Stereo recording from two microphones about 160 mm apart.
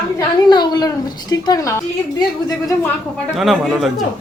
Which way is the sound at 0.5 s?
25° left (ahead or behind).